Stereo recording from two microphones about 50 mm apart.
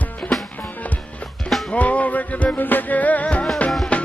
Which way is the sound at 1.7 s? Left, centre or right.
Left.